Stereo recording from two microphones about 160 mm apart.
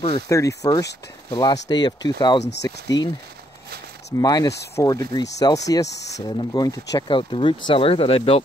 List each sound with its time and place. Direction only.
0.3 s speech: 20° left (ahead or behind)
4.2 s speech: 25° left (ahead or behind)